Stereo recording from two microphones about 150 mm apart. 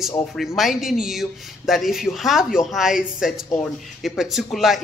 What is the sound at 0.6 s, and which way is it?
A woman's voice, centre (ahead or behind).